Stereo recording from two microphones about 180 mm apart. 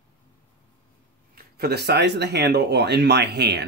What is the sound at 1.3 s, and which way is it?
Speech, 60° right (ahead or behind).